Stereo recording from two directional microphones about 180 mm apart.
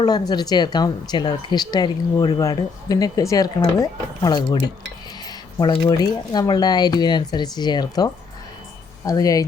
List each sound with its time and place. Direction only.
0.0 s speech: 20° left (ahead or behind)